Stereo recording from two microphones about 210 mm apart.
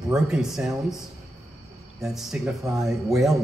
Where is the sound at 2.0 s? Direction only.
Centre (ahead or behind).